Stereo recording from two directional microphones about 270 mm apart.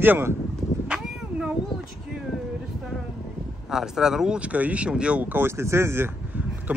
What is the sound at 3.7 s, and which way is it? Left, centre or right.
Speech, centre.